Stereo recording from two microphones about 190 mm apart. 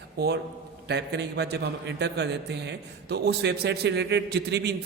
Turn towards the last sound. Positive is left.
turn(degrees=-60)  # may be behind; listen again after turning